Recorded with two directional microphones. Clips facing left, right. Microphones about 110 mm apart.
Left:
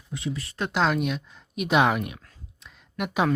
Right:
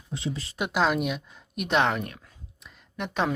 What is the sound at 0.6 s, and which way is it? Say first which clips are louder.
Speech: even; 5° right (ahead or behind).